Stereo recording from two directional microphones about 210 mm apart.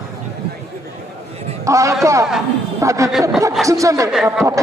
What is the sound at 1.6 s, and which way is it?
A man's voice, 15° right (ahead or behind).